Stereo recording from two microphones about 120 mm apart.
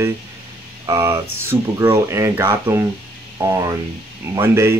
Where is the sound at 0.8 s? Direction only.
25° right (ahead or behind).